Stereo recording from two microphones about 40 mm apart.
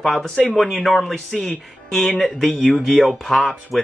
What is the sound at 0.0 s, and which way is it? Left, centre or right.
Speech, centre.